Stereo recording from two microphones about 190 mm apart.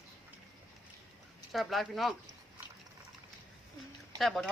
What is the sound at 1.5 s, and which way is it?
Speech, centre (ahead or behind).